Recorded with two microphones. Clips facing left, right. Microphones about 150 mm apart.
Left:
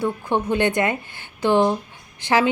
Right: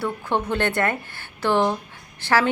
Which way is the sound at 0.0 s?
15° left (ahead or behind).